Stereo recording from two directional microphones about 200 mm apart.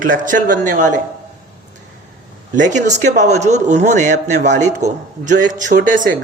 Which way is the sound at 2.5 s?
40° right (ahead or behind).